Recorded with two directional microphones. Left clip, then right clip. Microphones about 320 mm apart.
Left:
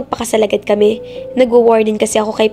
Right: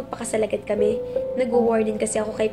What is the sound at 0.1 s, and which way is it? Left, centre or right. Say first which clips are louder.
A woman's voice: left 10 dB; left.